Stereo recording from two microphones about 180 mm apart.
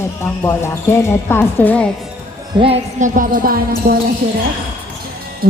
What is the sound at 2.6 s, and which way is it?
Music, 40° right (ahead or behind).